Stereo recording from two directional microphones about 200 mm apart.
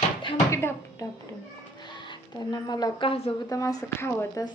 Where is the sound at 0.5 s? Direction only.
15° left (ahead or behind).